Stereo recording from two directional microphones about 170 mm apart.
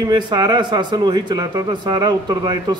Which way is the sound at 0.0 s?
25° right (ahead or behind).